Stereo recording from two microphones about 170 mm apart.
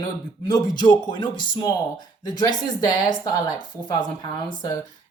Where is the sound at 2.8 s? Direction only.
25° left (ahead or behind).